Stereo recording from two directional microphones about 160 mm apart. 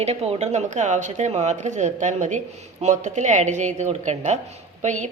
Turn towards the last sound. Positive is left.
turn(degrees=-50)  # may be behind; listen again after turning